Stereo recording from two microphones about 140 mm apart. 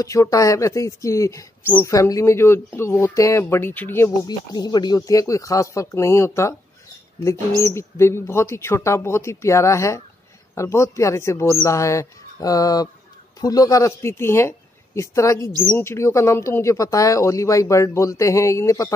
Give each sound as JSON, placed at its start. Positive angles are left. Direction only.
{"t": 0.0, "sound": "speech", "side_deg": 25}
{"t": 4.3, "sound": "speech", "side_deg": 30}
{"t": 7.6, "sound": "speech", "side_deg": 20}